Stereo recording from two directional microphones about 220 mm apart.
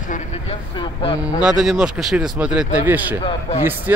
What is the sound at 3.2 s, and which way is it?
Speech, 30° left (ahead or behind).